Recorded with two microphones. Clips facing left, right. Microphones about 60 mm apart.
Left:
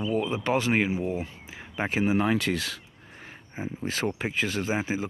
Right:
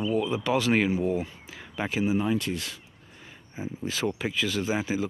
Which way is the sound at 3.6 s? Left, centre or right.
Left.